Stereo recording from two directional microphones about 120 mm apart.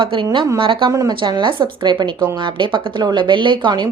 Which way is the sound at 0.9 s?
30° right (ahead or behind).